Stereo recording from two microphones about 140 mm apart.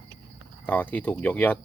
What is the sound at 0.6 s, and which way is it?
Speech, 10° left (ahead or behind).